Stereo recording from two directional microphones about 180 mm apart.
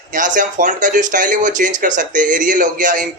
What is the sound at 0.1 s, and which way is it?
Speech, 45° right (ahead or behind).